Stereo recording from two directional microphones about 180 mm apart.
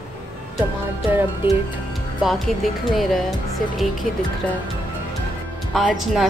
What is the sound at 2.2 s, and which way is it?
A woman's voice, centre (ahead or behind).